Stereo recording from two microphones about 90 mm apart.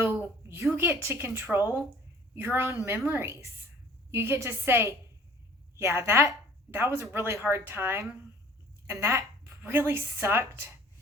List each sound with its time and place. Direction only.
0.0 s a woman's voice: 25° right (ahead or behind)